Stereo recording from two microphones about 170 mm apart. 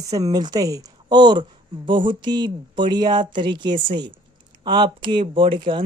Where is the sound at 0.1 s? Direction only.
20° right (ahead or behind).